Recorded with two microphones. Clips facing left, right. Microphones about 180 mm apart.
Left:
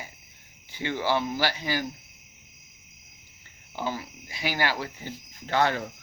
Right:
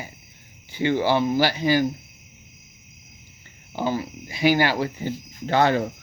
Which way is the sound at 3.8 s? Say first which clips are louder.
Right 7 dB; 25° right (ahead or behind).